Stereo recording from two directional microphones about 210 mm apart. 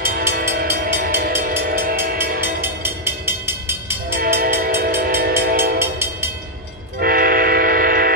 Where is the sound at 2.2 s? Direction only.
10° right (ahead or behind).